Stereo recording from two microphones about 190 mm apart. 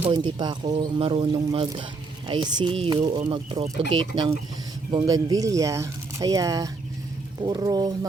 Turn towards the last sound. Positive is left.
turn(degrees=-20)  # may be behind; listen again after turning